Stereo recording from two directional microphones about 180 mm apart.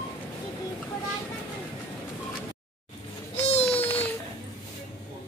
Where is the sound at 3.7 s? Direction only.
10° left (ahead or behind).